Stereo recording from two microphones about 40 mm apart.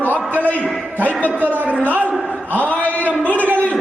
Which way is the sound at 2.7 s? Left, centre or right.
Left.